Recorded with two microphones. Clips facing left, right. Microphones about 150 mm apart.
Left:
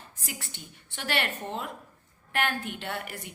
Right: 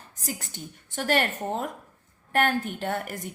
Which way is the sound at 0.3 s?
40° right (ahead or behind).